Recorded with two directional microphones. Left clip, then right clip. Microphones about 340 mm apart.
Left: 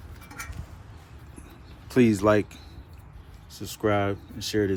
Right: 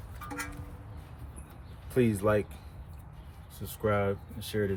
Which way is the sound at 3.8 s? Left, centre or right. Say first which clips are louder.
Left 4 dB; centre.